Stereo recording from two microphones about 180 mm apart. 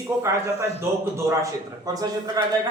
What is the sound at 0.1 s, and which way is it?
Speech, 15° right (ahead or behind).